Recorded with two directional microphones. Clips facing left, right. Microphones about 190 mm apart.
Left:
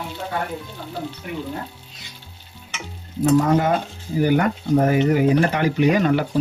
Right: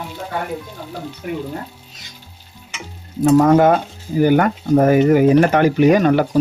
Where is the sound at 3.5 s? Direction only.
50° right (ahead or behind).